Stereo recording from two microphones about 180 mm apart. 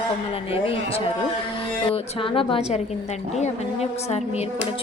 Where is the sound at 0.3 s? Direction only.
30° left (ahead or behind).